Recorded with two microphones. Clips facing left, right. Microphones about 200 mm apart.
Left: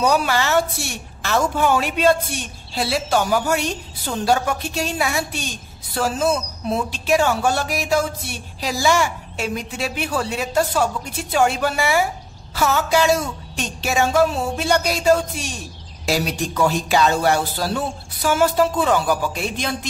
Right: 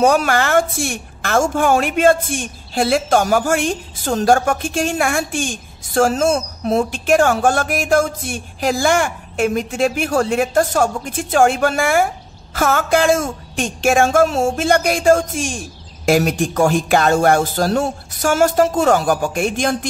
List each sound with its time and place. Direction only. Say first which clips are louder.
0.3 s a woman's voice: right 3 dB; 50° right (ahead or behind)